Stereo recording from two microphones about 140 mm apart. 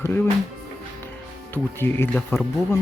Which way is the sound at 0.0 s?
15° left (ahead or behind).